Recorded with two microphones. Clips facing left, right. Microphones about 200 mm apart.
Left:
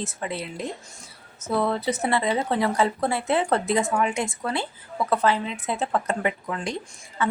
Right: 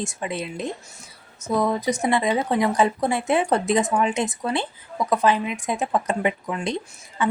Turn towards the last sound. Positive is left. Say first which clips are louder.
# right 2 dB
turn(degrees=-15)  # may be behind; listen again after turning